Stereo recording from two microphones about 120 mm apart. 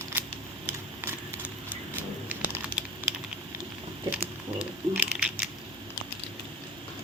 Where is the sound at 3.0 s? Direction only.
15° right (ahead or behind).